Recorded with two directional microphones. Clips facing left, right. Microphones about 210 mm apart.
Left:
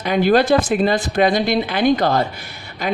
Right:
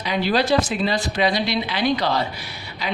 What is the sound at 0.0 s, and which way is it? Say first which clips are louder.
Speech: left 6 dB; 50° left (ahead or behind).